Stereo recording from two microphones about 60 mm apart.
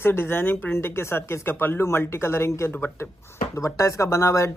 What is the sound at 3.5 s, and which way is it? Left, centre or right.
Speech, left.